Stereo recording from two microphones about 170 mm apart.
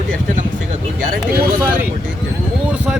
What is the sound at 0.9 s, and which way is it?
Speech, 55° right (ahead or behind).